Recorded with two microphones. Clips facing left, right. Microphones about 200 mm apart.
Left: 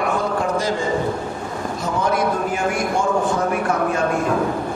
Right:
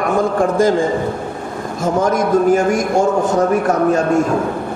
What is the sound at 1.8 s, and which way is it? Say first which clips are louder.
A man's voice: right 5 dB; 45° right (ahead or behind).